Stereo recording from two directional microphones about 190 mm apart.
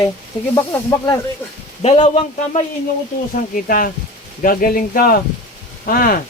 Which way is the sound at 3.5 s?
50° left (ahead or behind).